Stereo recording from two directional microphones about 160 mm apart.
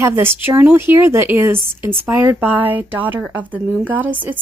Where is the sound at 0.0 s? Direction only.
15° right (ahead or behind).